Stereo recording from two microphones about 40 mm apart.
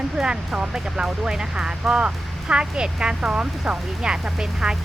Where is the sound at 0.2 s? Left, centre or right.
Right.